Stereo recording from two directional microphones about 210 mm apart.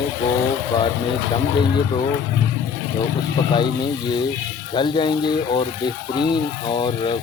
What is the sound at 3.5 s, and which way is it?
Speech, 20° left (ahead or behind).